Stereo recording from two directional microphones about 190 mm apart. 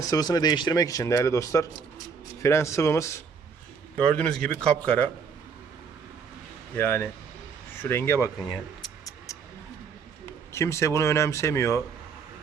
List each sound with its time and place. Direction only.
0.0 s a man's voice: 20° left (ahead or behind)
6.7 s speech: 10° left (ahead or behind)
9.0 s a sound: 15° left (ahead or behind)
10.5 s speech: 15° left (ahead or behind)